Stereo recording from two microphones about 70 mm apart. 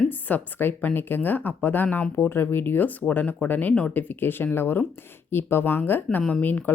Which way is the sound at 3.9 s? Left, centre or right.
Left.